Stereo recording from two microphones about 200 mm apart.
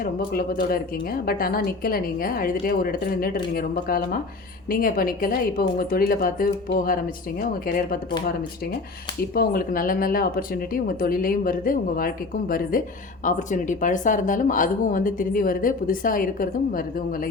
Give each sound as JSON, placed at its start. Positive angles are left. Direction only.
{"t": 0.3, "sound": "speech", "side_deg": 50}
{"t": 9.3, "sound": "speech", "side_deg": 50}